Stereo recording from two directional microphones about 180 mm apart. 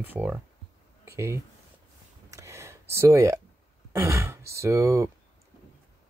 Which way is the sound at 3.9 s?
15° right (ahead or behind).